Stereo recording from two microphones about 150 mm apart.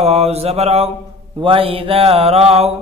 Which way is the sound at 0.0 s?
45° right (ahead or behind).